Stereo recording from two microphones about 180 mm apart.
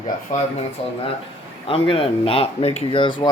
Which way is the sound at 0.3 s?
45° left (ahead or behind).